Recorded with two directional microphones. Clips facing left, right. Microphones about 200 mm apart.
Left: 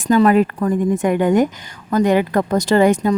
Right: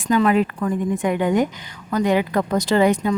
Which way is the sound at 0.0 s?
40° left (ahead or behind).